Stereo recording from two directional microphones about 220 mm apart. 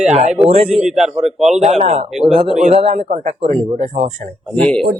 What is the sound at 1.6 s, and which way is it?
Speech, 30° right (ahead or behind).